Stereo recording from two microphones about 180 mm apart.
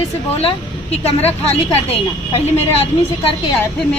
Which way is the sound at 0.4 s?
35° left (ahead or behind).